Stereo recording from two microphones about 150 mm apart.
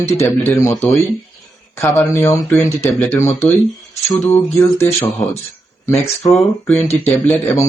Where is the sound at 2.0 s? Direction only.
20° left (ahead or behind).